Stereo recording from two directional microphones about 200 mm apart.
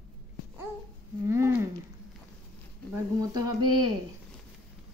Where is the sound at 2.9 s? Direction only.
20° right (ahead or behind).